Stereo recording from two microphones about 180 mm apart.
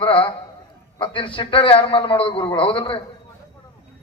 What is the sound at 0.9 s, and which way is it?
A man's voice, 30° left (ahead or behind).